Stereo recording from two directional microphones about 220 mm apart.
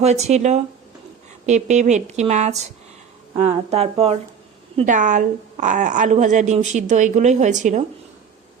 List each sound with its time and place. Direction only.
0.0 s speech: 30° right (ahead or behind)